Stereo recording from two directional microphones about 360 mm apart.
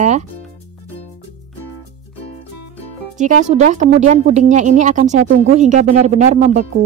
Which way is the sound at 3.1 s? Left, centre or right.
Centre.